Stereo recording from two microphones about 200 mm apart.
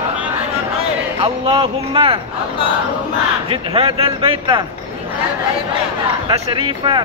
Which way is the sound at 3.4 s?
30° right (ahead or behind).